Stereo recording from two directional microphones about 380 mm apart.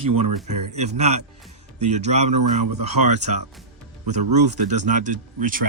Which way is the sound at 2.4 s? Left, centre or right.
Right.